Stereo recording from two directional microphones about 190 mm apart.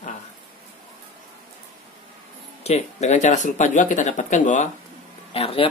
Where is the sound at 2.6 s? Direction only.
35° left (ahead or behind).